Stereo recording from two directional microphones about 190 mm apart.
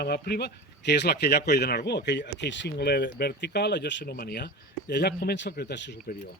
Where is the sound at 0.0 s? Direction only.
60° left (ahead or behind).